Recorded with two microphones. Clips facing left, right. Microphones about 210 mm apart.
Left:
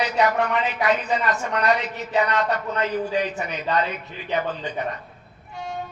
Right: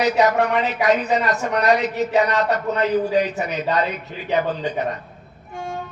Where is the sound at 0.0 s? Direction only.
40° right (ahead or behind).